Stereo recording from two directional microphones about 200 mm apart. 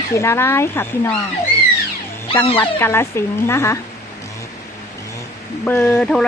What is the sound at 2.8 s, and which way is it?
Speech, 10° left (ahead or behind).